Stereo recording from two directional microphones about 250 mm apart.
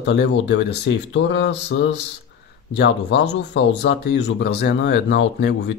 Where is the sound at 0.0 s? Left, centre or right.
Left.